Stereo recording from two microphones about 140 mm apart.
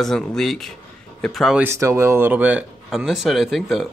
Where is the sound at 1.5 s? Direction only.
20° right (ahead or behind).